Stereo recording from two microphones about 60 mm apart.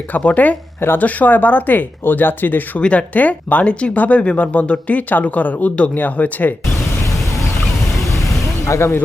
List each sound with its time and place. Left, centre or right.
0.2 s speech: left
8.6 s speech: left